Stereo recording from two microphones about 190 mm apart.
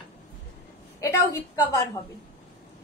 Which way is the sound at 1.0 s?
15° left (ahead or behind).